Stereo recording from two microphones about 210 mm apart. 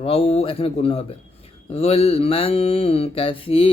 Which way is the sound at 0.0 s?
30° left (ahead or behind).